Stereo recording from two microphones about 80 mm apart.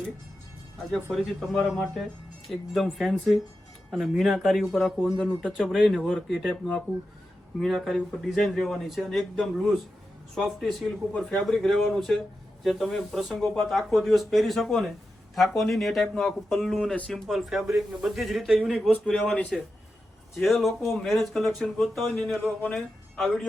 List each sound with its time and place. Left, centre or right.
1.1 s speech: centre
19.3 s speech: centre
20.3 s speech: centre